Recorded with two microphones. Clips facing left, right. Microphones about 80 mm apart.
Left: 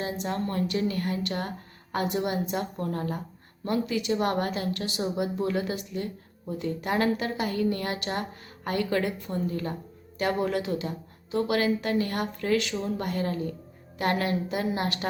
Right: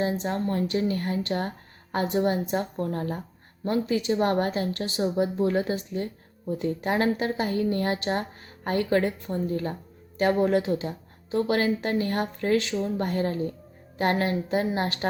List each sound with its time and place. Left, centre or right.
0.0 s speech: right